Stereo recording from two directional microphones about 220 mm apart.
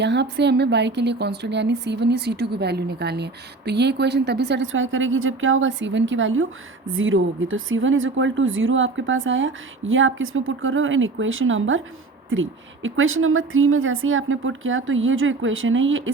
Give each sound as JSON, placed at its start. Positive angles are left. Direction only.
{"t": 0.0, "sound": "a woman's voice", "side_deg": -50}